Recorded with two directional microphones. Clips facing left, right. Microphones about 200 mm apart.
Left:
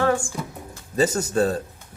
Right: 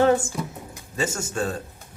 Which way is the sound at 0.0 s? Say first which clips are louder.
Right 3 dB; 20° right (ahead or behind).